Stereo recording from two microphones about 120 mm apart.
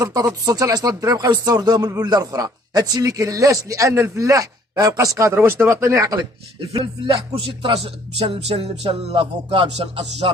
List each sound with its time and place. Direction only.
0.0 s speech: 30° right (ahead or behind)
6.1 s music: 45° right (ahead or behind)